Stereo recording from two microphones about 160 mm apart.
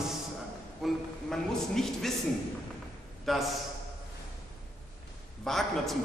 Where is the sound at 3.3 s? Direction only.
Centre (ahead or behind).